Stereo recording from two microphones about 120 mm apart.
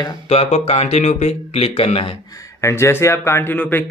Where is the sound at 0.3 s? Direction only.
60° left (ahead or behind).